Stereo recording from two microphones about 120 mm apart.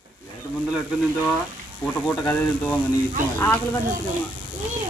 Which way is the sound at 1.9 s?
10° left (ahead or behind).